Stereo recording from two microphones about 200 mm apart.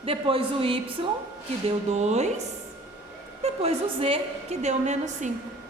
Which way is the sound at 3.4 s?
30° right (ahead or behind).